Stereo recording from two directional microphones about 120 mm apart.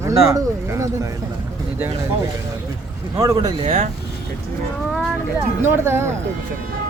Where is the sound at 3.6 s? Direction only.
60° right (ahead or behind).